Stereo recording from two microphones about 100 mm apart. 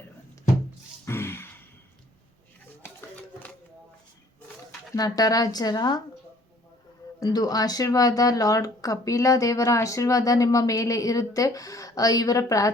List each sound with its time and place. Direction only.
1.0 s a sound: 25° left (ahead or behind)
4.9 s speech: 40° left (ahead or behind)
7.2 s speech: 40° left (ahead or behind)